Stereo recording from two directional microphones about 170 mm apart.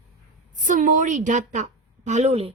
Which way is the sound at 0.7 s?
50° right (ahead or behind).